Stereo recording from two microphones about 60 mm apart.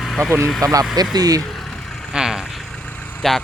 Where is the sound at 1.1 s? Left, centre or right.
Right.